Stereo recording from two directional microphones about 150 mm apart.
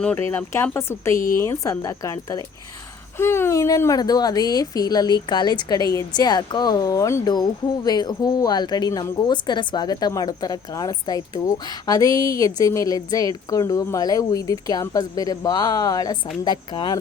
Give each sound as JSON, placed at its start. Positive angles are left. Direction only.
{"t": 0.0, "sound": "speech", "side_deg": 15}